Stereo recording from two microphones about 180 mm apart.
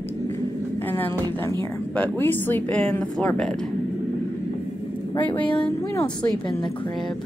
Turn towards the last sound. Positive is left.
turn(degrees=5)  # may be behind; listen again after turning